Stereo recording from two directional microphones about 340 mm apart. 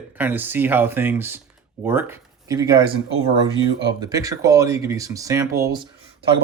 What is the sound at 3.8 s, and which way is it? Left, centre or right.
Speech, centre.